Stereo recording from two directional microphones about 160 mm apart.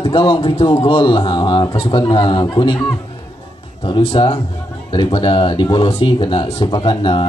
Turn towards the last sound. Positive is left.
turn(degrees=30)  # may be behind; listen again after turning